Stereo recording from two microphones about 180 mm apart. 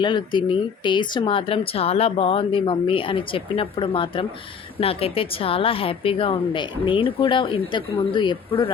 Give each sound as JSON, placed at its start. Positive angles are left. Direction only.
{"t": 0.0, "sound": "speech", "side_deg": 25}